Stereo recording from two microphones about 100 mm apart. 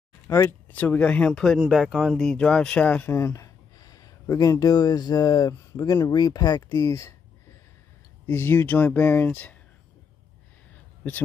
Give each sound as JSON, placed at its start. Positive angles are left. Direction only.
{"t": 0.3, "sound": "speech", "side_deg": 25}
{"t": 1.6, "sound": "speech", "side_deg": -5}
{"t": 3.1, "sound": "speech", "side_deg": 25}
{"t": 8.3, "sound": "speech", "side_deg": 25}